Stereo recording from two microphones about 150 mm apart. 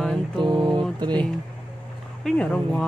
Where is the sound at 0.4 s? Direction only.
30° right (ahead or behind).